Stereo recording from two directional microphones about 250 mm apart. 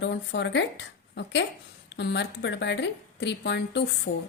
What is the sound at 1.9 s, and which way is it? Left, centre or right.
A woman's voice, left.